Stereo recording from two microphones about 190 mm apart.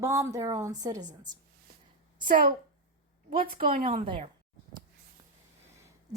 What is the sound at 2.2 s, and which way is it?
Speech, 50° right (ahead or behind).